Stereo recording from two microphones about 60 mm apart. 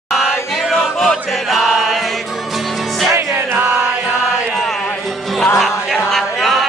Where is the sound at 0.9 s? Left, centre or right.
Centre.